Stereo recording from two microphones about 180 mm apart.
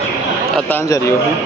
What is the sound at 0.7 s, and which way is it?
Speech, 20° left (ahead or behind).